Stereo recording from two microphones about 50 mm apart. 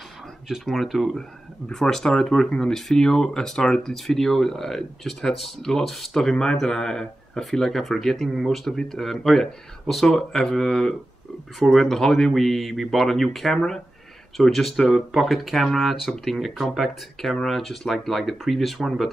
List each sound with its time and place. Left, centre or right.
0.5 s speech: centre